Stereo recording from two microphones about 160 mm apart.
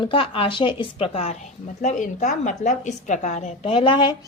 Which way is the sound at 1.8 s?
50° left (ahead or behind).